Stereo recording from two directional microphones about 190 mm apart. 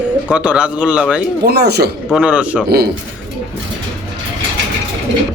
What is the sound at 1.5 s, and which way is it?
Speech, 60° right (ahead or behind).